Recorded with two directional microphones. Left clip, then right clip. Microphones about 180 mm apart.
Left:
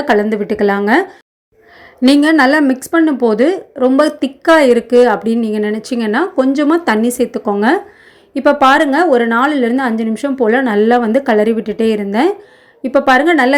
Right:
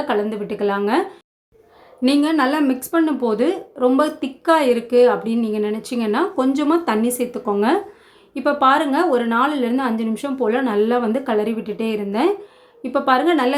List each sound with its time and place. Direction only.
0.1 s a woman's voice: 35° left (ahead or behind)